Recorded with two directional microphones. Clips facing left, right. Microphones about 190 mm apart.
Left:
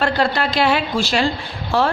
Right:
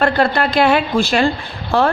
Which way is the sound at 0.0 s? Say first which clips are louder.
Right 3 dB; 55° right (ahead or behind).